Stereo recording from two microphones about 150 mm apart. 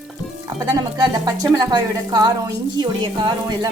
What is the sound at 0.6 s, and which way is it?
Speech, 25° right (ahead or behind).